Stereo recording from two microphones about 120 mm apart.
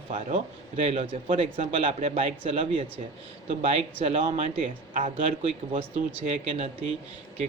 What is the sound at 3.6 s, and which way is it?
Speech, 65° right (ahead or behind).